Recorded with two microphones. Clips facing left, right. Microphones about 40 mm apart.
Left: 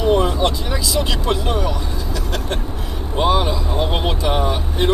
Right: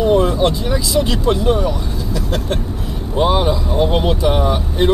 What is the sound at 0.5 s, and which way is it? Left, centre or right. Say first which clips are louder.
Speech: right 4 dB; centre.